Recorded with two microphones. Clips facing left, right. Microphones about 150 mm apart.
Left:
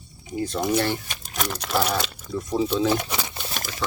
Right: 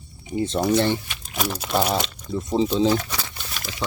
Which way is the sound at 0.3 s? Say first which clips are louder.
Right 3 dB; 25° right (ahead or behind).